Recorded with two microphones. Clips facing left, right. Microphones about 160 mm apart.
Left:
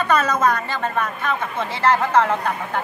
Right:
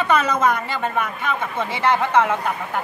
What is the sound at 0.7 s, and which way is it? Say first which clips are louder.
A woman's voice: even; 15° right (ahead or behind).